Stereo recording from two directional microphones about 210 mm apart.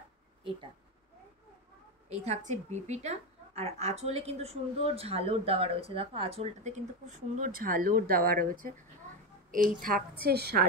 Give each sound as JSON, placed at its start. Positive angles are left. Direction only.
{"t": 0.4, "sound": "speech", "side_deg": -25}
{"t": 2.7, "sound": "a woman's voice", "side_deg": -35}